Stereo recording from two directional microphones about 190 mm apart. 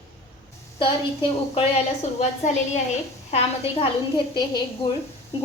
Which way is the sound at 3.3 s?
30° left (ahead or behind).